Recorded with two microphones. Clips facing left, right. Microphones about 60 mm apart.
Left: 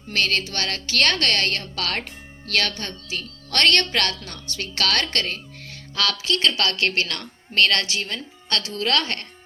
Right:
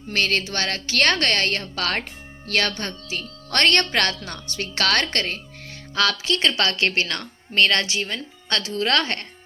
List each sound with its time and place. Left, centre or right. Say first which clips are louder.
0.1 s a woman's voice: right 1 dB; right